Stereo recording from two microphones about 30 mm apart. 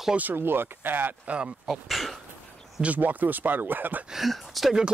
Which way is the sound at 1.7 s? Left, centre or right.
Centre.